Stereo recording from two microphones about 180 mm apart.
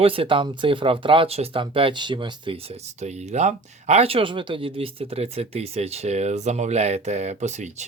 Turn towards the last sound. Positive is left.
turn(degrees=-40)  # may be behind; listen again after turning